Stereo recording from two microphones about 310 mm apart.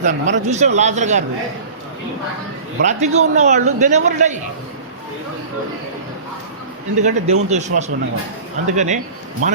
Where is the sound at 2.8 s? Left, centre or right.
Right.